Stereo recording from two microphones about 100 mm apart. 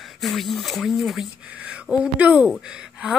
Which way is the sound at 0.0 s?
Centre (ahead or behind).